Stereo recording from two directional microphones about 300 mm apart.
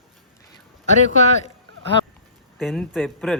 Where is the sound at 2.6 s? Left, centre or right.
Centre.